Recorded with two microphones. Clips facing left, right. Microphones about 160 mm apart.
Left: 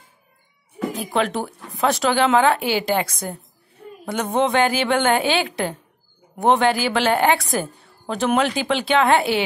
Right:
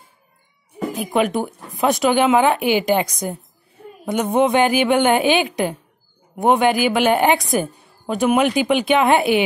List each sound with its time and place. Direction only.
1.1 s speech: 15° right (ahead or behind)